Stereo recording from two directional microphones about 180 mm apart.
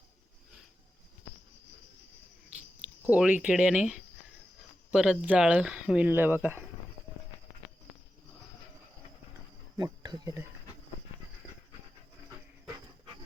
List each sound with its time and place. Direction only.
3.1 s speech: 10° right (ahead or behind)
9.7 s cricket: 20° right (ahead or behind)